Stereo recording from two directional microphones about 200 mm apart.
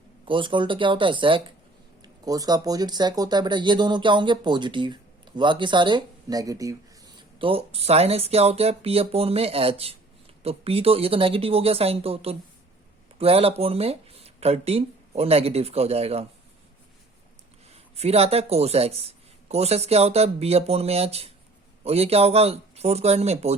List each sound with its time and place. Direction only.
0.3 s speech: 25° right (ahead or behind)
17.7 s speech: 30° right (ahead or behind)